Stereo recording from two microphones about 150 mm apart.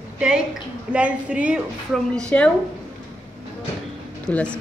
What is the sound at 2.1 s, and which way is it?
Speech, 5° left (ahead or behind).